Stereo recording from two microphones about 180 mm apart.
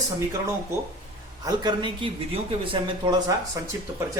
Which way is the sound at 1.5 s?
25° right (ahead or behind).